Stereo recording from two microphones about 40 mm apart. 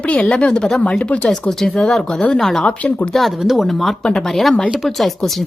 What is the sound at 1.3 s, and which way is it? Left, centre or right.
Speech, centre.